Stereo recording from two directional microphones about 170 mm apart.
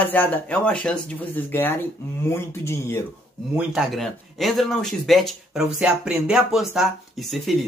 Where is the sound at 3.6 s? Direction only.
Centre (ahead or behind).